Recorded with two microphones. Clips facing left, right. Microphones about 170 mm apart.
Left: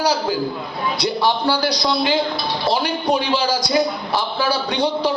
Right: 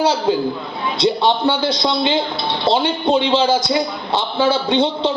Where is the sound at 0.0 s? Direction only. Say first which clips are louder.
Right 3 dB; 25° right (ahead or behind).